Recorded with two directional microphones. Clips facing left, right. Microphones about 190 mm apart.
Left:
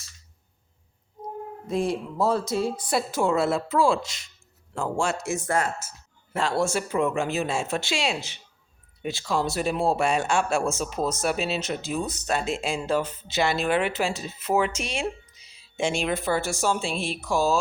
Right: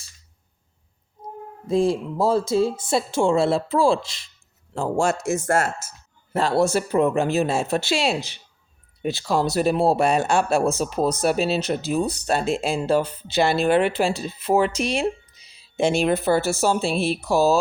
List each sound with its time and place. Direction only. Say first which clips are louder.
1.6 s a man's voice: right 6 dB; 30° right (ahead or behind)
5.4 s speech: right 4 dB; 85° right
6.3 s speech: right 5 dB; 35° right (ahead or behind)
16.9 s speech: right 7 dB; 5° right (ahead or behind)
17.2 s speech: right 4 dB; 40° right (ahead or behind)